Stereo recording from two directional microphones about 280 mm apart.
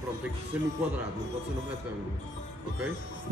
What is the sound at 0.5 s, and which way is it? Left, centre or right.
Speech, centre.